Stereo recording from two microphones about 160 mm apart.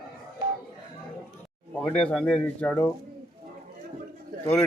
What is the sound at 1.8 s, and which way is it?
Speech, 5° left (ahead or behind).